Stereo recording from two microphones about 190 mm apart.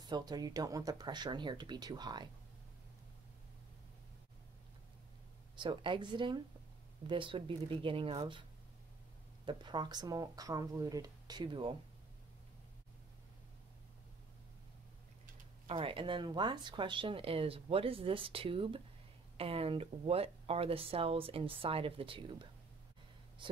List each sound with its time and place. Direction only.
0.1 s speech: 20° right (ahead or behind)
5.6 s speech: 25° right (ahead or behind)
9.5 s speech: 25° right (ahead or behind)
15.6 s speech: 30° right (ahead or behind)